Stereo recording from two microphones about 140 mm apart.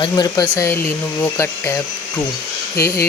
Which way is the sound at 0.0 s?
30° left (ahead or behind).